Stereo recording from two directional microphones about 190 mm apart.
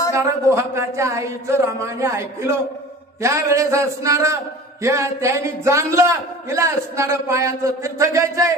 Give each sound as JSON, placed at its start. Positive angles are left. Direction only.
{"t": 0.1, "sound": "a man's voice", "side_deg": -15}